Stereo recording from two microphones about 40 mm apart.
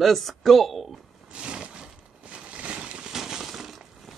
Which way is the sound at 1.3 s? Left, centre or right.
Right.